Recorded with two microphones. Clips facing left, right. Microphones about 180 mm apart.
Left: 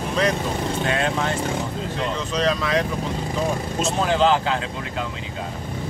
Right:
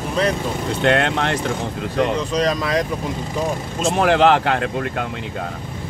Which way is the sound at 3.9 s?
70° right (ahead or behind).